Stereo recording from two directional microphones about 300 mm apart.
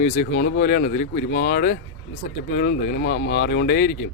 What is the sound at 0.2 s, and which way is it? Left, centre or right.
A man's voice, left.